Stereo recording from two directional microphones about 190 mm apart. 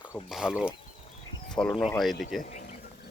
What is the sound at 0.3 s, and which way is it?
Speech, 5° right (ahead or behind).